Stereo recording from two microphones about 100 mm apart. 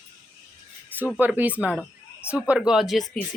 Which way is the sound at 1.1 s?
20° right (ahead or behind).